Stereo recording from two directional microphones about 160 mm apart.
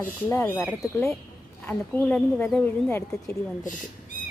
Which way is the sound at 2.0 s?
5° left (ahead or behind).